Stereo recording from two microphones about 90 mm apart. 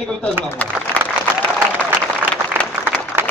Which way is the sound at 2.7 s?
20° right (ahead or behind).